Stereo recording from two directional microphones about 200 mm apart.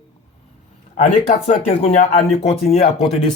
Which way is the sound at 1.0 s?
35° left (ahead or behind).